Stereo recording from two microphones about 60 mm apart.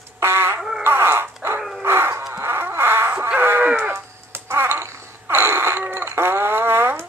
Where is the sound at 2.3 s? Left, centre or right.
Right.